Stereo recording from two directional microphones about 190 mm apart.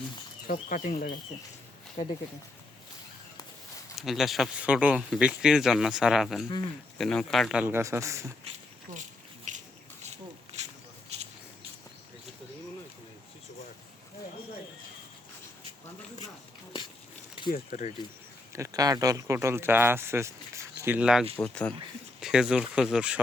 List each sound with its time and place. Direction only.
0.5 s speech: 45° left (ahead or behind)
3.9 s speech: centre (ahead or behind); by 8.2 s 15° right (ahead or behind)
9.5 s a sound: 40° right (ahead or behind)
17.5 s speech: 45° left (ahead or behind)
18.5 s speech: 15° right (ahead or behind)
21.3 s speech: 5° left (ahead or behind)